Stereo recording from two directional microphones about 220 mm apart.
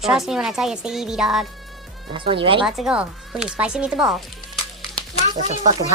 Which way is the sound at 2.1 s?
25° right (ahead or behind).